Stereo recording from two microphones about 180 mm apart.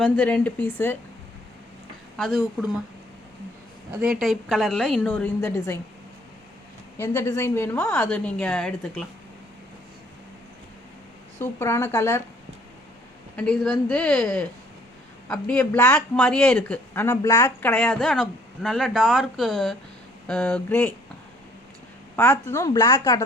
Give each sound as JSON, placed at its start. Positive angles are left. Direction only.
{"t": 0.0, "sound": "speech", "side_deg": 5}
{"t": 2.1, "sound": "speech", "side_deg": 0}
{"t": 3.9, "sound": "speech", "side_deg": -5}
{"t": 7.0, "sound": "speech", "side_deg": 15}
{"t": 11.3, "sound": "speech", "side_deg": 15}
{"t": 13.3, "sound": "speech", "side_deg": 5}
{"t": 22.1, "sound": "speech", "side_deg": 10}